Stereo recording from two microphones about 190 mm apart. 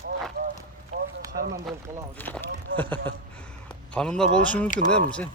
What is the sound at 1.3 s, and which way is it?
Speech, 55° right (ahead or behind).